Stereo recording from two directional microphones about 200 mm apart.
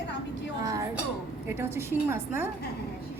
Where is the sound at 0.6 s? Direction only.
15° right (ahead or behind).